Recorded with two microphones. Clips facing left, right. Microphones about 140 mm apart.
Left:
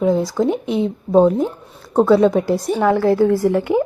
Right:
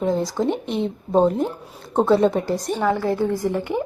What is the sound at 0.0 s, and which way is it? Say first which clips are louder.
A woman's voice: left 4 dB; 5° left (ahead or behind).